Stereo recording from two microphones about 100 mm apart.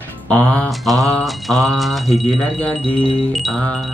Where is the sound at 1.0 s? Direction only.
Centre (ahead or behind).